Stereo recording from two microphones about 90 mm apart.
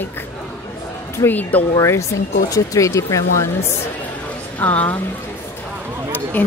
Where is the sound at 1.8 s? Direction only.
35° left (ahead or behind).